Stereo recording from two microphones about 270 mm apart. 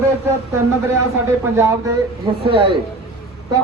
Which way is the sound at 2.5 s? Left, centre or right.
Centre.